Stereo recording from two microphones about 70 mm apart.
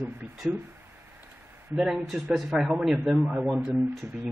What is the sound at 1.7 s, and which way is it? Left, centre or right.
A man's voice, centre.